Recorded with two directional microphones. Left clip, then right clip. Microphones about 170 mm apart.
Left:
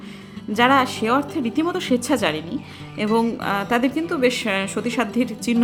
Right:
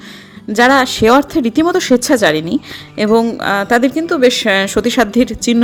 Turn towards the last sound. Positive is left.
turn(degrees=-30)  # may be behind; listen again after turning